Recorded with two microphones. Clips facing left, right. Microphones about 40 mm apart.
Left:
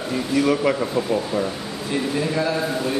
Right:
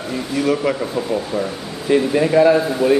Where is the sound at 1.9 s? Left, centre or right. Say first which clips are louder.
Right 9 dB; right.